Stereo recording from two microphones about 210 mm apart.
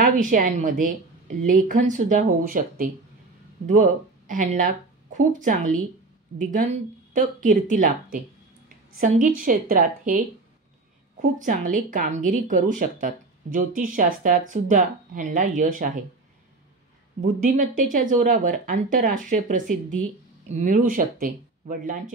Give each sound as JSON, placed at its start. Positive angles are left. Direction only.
{"t": 0.0, "sound": "a woman's voice", "side_deg": -40}
{"t": 17.2, "sound": "a woman's voice", "side_deg": -40}